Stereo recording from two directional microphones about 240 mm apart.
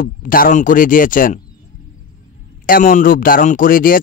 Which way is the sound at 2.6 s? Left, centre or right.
Left.